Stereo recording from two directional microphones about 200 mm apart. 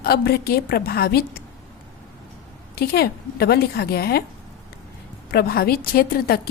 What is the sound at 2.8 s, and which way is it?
A woman's voice, 50° left (ahead or behind).